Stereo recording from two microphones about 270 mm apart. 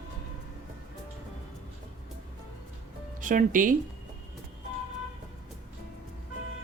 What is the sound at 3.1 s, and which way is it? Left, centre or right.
Speech, right.